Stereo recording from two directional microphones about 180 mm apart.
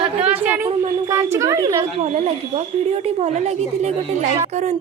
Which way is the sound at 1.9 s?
40° right (ahead or behind).